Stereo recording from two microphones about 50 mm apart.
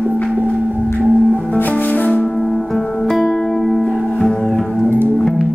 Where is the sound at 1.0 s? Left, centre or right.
Right.